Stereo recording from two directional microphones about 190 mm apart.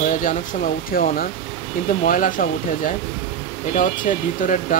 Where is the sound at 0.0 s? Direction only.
45° left (ahead or behind).